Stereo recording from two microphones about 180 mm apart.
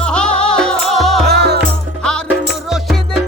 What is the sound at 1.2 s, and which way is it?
Music, 65° right (ahead or behind).